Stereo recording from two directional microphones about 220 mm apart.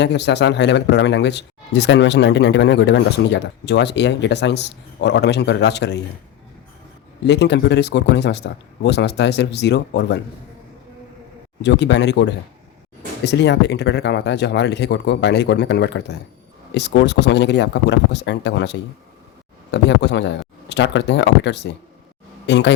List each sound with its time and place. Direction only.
0.0 s speech: 50° left (ahead or behind)
7.3 s speech: 50° left (ahead or behind)
11.6 s speech: 50° left (ahead or behind)